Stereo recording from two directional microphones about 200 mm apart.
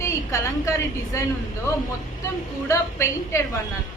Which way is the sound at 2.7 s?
15° left (ahead or behind).